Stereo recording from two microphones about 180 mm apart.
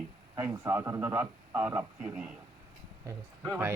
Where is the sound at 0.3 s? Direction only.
15° right (ahead or behind).